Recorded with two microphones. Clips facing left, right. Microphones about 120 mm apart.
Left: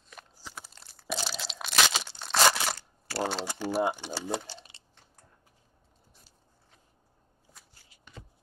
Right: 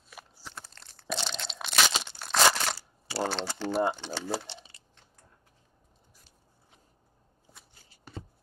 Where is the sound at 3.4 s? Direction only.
10° left (ahead or behind).